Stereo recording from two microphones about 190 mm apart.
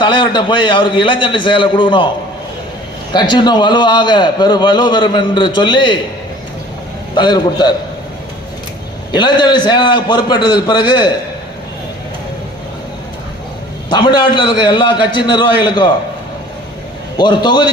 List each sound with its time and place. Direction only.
0.0 s a man's voice: 25° left (ahead or behind)
3.1 s a man's voice: 25° left (ahead or behind)
7.1 s a man's voice: 25° left (ahead or behind)
9.1 s a man's voice: 25° left (ahead or behind)
13.9 s a man's voice: 25° left (ahead or behind)
17.2 s a man's voice: 25° left (ahead or behind)